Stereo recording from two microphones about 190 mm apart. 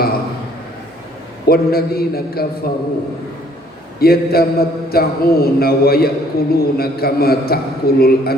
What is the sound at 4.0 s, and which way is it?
A man's voice, 55° left (ahead or behind).